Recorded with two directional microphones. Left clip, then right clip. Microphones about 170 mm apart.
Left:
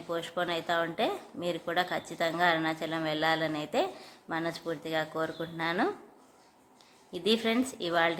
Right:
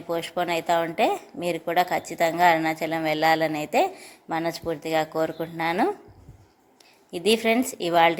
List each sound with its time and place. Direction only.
0.1 s a woman's voice: 25° right (ahead or behind)
7.1 s a woman's voice: 25° right (ahead or behind)